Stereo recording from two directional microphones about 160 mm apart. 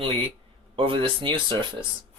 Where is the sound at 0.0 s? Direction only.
30° right (ahead or behind).